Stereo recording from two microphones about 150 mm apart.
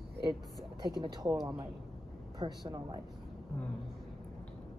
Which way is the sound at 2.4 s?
25° right (ahead or behind).